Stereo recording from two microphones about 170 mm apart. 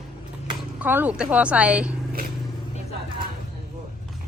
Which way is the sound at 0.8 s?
10° right (ahead or behind).